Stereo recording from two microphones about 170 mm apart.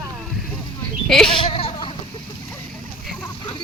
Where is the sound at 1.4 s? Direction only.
30° left (ahead or behind).